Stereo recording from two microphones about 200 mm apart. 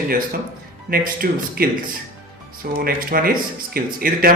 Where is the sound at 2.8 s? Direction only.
50° right (ahead or behind).